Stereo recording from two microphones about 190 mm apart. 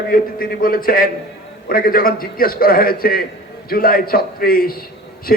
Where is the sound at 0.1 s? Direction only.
50° left (ahead or behind).